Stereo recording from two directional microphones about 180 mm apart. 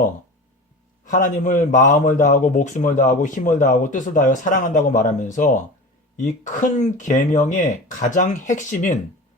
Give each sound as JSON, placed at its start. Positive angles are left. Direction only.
{"t": 1.0, "sound": "a man's voice", "side_deg": 45}